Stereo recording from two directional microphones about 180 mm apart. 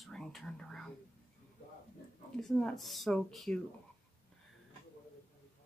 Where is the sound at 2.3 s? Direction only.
5° left (ahead or behind).